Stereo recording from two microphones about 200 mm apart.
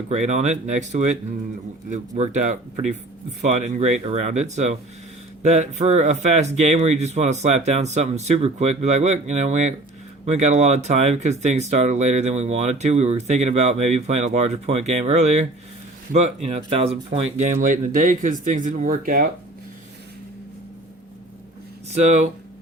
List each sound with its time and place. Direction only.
0.1 s speech: 35° right (ahead or behind)
21.9 s speech: 35° right (ahead or behind)